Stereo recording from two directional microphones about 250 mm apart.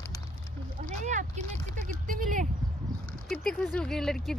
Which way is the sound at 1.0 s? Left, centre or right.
Right.